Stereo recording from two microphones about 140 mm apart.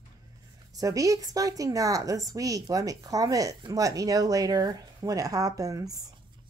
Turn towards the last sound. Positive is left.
turn(degrees=-25)  # may be behind; listen again after turning